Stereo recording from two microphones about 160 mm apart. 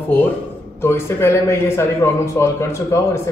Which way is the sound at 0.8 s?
15° left (ahead or behind).